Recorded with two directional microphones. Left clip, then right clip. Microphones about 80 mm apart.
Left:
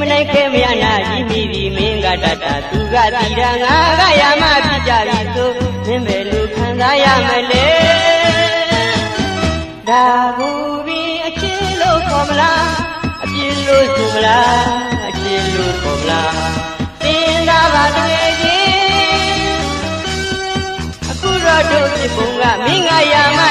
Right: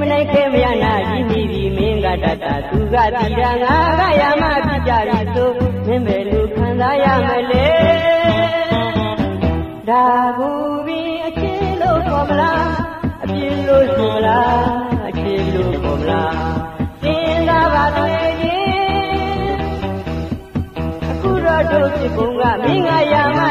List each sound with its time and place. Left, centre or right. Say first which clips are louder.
0.0 s music: left 2 dB; centre
9.8 s music: left 2 dB; right
11.8 s music: left 3 dB; right
14.2 s music: left 5 dB; right
17.0 s music: left 3 dB; right
21.5 s music: left 3 dB; right